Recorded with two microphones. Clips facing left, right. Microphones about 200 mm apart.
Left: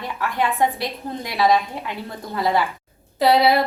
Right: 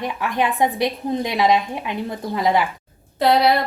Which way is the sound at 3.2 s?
Centre (ahead or behind).